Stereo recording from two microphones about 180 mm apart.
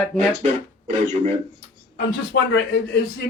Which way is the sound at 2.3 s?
65° left (ahead or behind).